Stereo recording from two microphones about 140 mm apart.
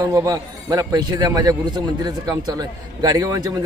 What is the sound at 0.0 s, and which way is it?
A man's voice, 25° right (ahead or behind).